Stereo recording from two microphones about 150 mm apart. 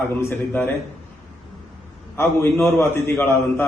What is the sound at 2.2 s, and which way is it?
A man's voice, 15° left (ahead or behind).